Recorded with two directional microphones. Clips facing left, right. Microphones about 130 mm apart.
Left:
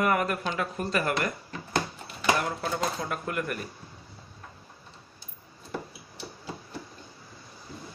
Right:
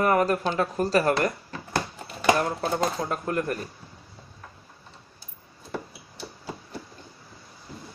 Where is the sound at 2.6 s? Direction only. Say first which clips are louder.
Right 4 dB; 35° right (ahead or behind).